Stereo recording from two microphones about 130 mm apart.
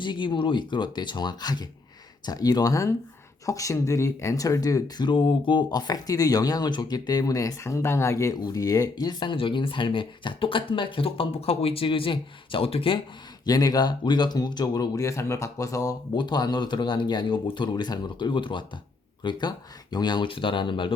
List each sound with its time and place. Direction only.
0.0 s speech: 35° left (ahead or behind)
13.4 s speech: 30° left (ahead or behind)